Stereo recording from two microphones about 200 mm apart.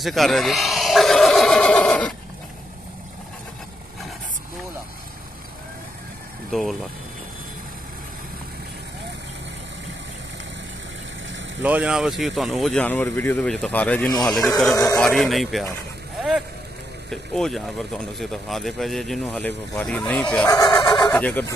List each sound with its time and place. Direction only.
0.0 s speech: centre (ahead or behind)
6.5 s speech: centre (ahead or behind)
11.6 s speech: 5° right (ahead or behind)
16.2 s vehicle: centre (ahead or behind)
17.1 s speech: centre (ahead or behind)
20.4 s fowl: 20° left (ahead or behind)
21.2 s speech: 10° left (ahead or behind)